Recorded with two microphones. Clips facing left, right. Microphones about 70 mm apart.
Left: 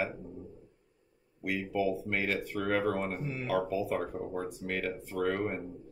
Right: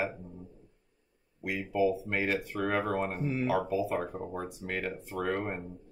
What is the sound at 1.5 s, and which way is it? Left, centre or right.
Speech, centre.